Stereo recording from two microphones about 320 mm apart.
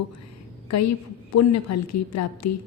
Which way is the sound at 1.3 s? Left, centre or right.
Left.